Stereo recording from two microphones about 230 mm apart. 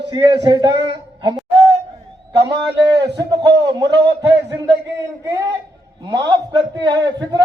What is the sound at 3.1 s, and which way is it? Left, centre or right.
A man's voice, centre.